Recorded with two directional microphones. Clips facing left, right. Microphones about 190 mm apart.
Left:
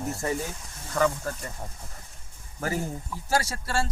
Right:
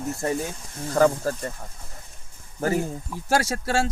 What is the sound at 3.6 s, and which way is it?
Speech, 90° right.